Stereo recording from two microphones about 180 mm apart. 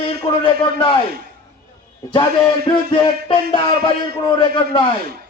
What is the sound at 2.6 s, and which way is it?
Speech, 30° left (ahead or behind).